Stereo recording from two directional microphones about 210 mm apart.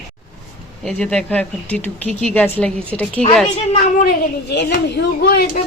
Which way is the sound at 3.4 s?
35° left (ahead or behind).